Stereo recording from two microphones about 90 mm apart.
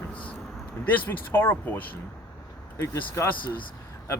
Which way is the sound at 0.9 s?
20° left (ahead or behind).